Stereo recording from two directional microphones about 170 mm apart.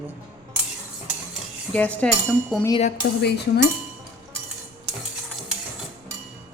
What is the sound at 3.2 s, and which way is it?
Music, 80° left.